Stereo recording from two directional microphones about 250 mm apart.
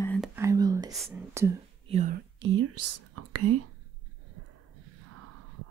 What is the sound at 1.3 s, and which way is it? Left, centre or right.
Speech, centre.